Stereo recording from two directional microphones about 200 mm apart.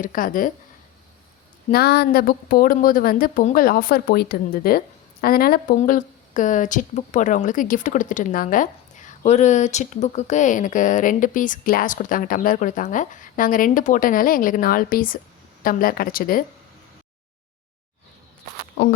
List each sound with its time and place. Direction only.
0.0 s speech: 45° left (ahead or behind)
1.7 s speech: 50° left (ahead or behind)